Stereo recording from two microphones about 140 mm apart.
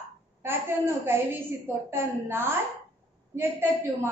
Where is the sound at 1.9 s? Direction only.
15° right (ahead or behind).